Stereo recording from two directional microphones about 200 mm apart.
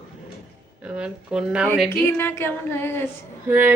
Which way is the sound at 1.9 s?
10° left (ahead or behind).